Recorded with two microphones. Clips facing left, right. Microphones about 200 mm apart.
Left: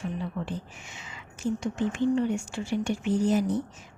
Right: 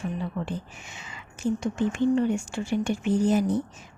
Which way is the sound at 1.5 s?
50° right (ahead or behind).